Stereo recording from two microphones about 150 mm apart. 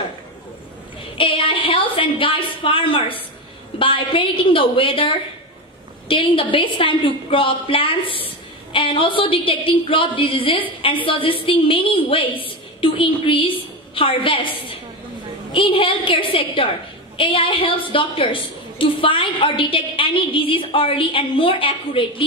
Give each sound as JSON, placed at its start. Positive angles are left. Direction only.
{"t": 1.1, "sound": "a woman's voice", "side_deg": 35}